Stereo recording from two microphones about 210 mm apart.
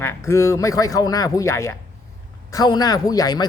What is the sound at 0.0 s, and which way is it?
Speech, 15° left (ahead or behind).